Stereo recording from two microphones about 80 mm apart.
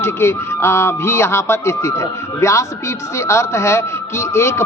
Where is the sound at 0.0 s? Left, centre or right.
Left.